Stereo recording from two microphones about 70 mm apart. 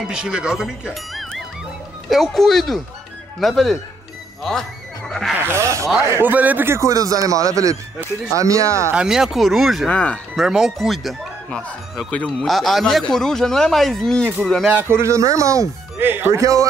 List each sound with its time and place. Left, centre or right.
0.1 s speech: centre
2.0 s speech: centre
5.5 s speech: right
6.3 s a man's voice: right
6.7 s speech: right
8.9 s speech: centre
9.8 s speech: centre
10.3 s speech: centre
12.1 s a man's voice: centre
12.4 s speech: centre
14.7 s speech: right
16.0 s speech: right
16.3 s speech: right